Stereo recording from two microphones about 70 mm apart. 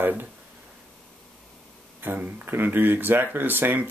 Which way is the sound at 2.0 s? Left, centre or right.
Right.